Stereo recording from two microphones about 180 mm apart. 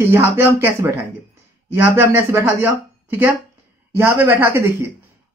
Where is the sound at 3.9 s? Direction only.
15° right (ahead or behind).